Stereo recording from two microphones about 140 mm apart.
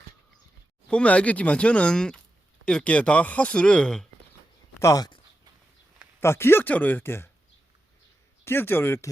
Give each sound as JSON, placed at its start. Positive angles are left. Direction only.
{"t": 0.9, "sound": "speech", "side_deg": 10}
{"t": 4.8, "sound": "speech", "side_deg": 25}
{"t": 6.1, "sound": "speech", "side_deg": 15}
{"t": 8.4, "sound": "speech", "side_deg": 15}